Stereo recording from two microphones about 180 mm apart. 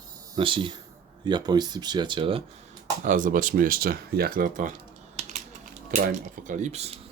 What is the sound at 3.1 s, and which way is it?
Speech, 50° right (ahead or behind).